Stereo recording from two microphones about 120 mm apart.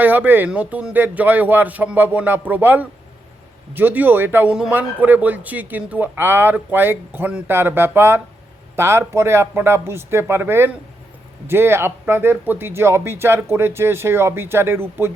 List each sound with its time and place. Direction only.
0.0 s speech: 15° right (ahead or behind)